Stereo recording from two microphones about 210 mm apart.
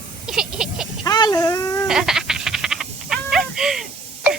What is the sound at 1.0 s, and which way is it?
Wail, 20° left (ahead or behind).